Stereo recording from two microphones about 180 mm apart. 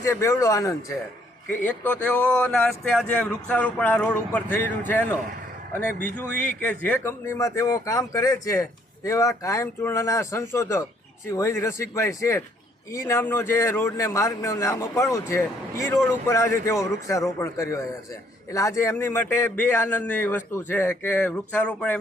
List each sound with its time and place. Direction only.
0.0 s a man's voice: 15° left (ahead or behind)
5.7 s a man's voice: 5° left (ahead or behind)